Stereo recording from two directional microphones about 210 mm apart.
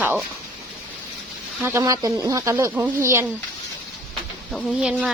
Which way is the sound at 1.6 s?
15° right (ahead or behind).